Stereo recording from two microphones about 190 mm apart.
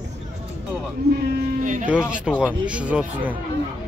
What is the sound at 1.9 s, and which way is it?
Speech, 5° right (ahead or behind).